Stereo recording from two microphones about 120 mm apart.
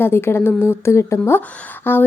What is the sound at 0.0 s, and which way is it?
A woman's voice, 20° left (ahead or behind).